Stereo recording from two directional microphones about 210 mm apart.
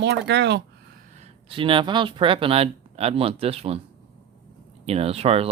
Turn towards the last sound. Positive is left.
turn(degrees=-30)  # may be behind; listen again after turning